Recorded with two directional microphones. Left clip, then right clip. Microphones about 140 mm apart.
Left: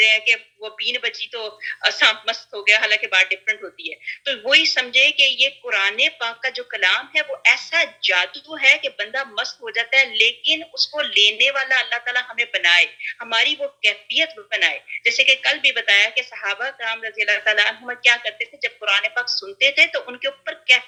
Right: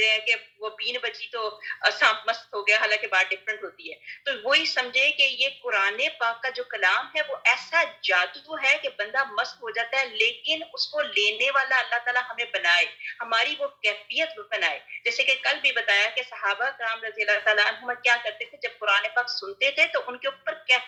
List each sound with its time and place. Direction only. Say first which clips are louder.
0.0 s speech: left 7 dB; 30° left (ahead or behind)